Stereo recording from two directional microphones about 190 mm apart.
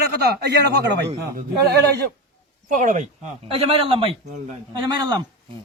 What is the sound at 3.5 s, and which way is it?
Speech, 30° right (ahead or behind).